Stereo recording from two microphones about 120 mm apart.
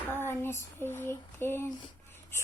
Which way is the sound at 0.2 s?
20° left (ahead or behind).